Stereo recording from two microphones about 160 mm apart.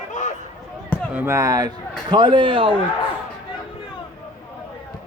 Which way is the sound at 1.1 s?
15° right (ahead or behind).